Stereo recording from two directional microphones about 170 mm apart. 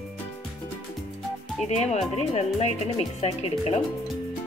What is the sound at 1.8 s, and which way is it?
Speech, 40° left (ahead or behind).